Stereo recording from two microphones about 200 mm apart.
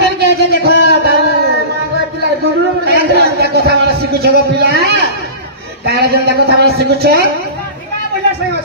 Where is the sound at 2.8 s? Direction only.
55° right (ahead or behind).